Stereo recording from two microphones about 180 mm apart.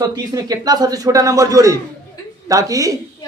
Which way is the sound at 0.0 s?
20° right (ahead or behind).